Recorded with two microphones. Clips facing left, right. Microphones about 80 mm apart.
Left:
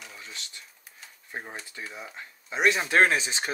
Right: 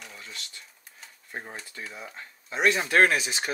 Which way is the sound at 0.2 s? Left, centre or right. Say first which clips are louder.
Even; left.